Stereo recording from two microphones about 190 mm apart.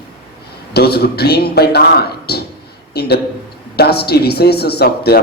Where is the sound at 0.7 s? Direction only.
55° left (ahead or behind).